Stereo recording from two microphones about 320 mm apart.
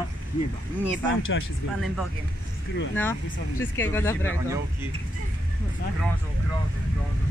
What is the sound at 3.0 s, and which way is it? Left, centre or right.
Speech, centre.